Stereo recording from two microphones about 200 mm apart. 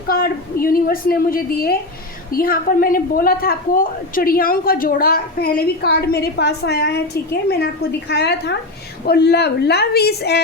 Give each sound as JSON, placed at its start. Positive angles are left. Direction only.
{"t": 0.1, "sound": "speech", "side_deg": 45}
{"t": 8.1, "sound": "a woman's voice", "side_deg": 55}